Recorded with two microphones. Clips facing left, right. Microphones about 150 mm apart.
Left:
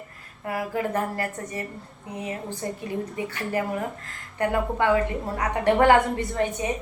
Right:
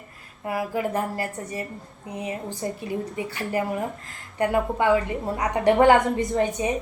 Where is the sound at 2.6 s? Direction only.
20° right (ahead or behind).